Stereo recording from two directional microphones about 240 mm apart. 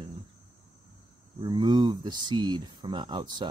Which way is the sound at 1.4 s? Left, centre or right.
Centre.